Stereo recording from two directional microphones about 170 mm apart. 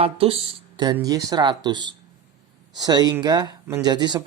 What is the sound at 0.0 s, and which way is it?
Speech, 35° right (ahead or behind).